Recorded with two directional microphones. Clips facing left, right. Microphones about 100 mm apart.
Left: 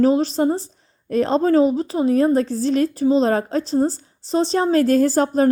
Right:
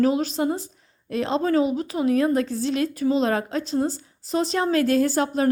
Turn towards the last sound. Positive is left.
turn(degrees=40)  # may be behind; listen again after turning